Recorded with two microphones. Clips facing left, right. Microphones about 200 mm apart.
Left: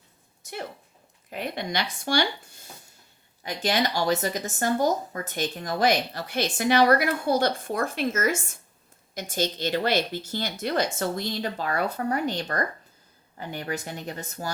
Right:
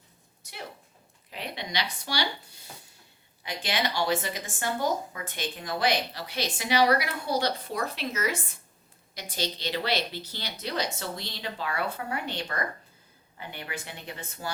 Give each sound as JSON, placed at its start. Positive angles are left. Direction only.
{"t": 1.3, "sound": "speech", "side_deg": 50}